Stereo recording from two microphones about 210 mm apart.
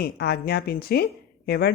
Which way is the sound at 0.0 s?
50° left (ahead or behind).